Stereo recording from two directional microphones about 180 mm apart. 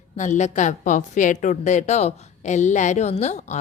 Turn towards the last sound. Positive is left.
turn(degrees=40)  # may be behind; listen again after turning